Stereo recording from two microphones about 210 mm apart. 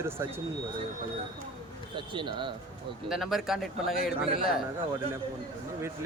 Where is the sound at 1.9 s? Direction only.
20° right (ahead or behind).